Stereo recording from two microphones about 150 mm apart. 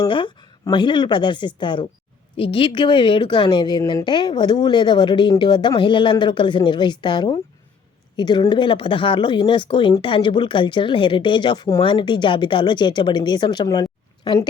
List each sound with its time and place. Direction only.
0.0 s speech: 30° left (ahead or behind)